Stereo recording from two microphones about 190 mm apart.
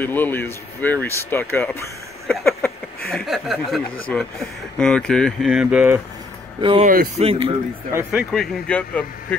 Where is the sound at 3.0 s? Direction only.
Centre (ahead or behind).